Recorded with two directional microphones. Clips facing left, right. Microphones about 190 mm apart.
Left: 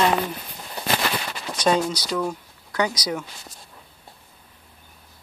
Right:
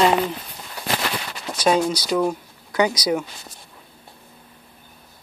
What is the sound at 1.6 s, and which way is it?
Speech, 10° right (ahead or behind).